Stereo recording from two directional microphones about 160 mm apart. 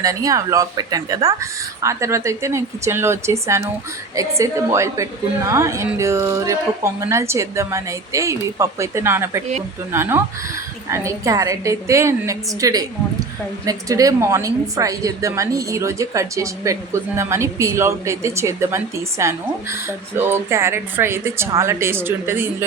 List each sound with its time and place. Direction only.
0.0 s a woman's voice: 20° right (ahead or behind)